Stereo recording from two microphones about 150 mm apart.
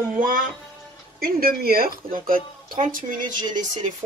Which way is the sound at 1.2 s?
80° right.